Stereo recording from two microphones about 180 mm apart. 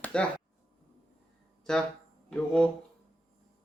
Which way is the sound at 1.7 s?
5° left (ahead or behind).